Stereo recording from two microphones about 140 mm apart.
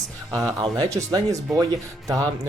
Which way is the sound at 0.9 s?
20° right (ahead or behind).